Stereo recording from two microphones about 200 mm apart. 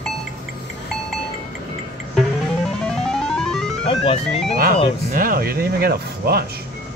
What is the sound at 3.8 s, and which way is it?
Speech, 30° left (ahead or behind).